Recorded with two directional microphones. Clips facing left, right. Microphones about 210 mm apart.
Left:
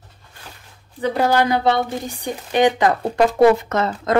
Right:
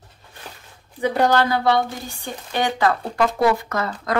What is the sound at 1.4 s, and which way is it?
Speech, 20° left (ahead or behind).